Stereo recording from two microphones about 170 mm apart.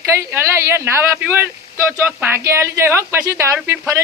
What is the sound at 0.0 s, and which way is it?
A woman's voice, 15° right (ahead or behind).